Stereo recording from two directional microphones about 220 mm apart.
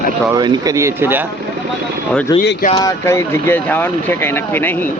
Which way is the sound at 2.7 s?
15° left (ahead or behind).